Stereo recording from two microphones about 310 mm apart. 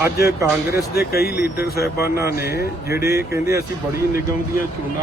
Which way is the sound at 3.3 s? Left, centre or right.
Centre.